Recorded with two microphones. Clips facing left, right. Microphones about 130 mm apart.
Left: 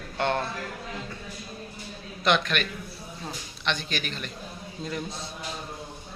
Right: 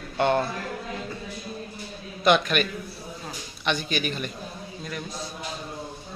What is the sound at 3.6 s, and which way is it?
Speech, 5° right (ahead or behind).